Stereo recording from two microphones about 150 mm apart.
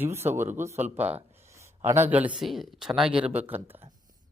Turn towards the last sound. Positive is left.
turn(degrees=-5)  # may be behind; listen again after turning